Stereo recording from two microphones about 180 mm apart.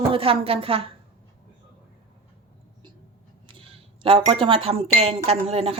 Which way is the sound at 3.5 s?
30° right (ahead or behind).